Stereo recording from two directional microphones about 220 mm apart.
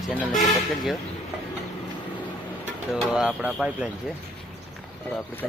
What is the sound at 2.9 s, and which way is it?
Speech, centre (ahead or behind).